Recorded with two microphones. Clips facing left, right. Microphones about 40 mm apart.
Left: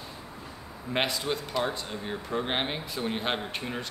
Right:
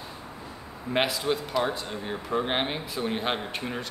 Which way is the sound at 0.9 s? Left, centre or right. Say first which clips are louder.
Right 3 dB; centre.